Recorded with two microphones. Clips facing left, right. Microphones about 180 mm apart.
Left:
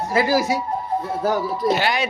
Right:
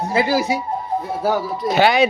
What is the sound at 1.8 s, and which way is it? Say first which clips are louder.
Speech: right 8 dB; 65° right (ahead or behind).